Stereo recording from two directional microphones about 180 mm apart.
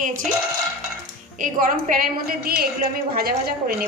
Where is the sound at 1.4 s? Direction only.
50° right (ahead or behind).